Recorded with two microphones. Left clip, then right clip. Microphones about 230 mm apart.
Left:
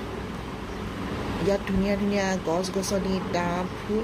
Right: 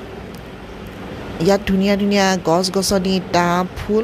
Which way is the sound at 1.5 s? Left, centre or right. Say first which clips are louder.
Right 10 dB; right.